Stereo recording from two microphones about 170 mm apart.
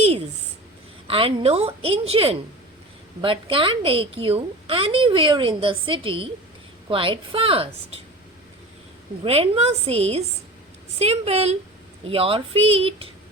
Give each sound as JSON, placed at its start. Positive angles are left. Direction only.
{"t": 1.0, "sound": "a woman's voice", "side_deg": -35}
{"t": 9.2, "sound": "a woman's voice", "side_deg": -35}